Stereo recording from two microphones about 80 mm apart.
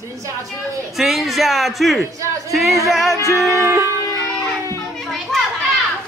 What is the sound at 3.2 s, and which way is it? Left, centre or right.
Music, left.